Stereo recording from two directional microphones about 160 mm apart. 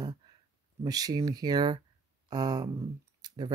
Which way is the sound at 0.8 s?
25° right (ahead or behind).